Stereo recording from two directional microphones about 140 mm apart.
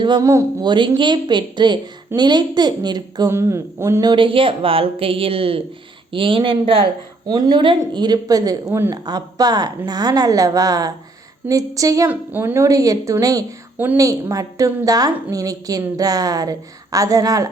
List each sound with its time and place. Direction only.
0.0 s a woman's voice: 35° right (ahead or behind)
4.0 s a woman's voice: 35° right (ahead or behind)
7.3 s a woman's voice: 30° right (ahead or behind)